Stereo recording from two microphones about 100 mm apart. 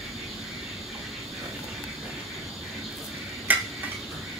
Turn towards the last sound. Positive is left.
turn(degrees=-15)  # may be behind; listen again after turning